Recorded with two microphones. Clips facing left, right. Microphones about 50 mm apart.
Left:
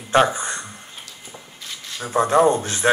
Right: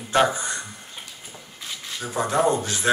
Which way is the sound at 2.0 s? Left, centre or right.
Left.